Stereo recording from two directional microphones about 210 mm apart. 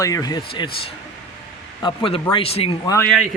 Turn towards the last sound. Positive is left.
turn(degrees=10)  # may be behind; listen again after turning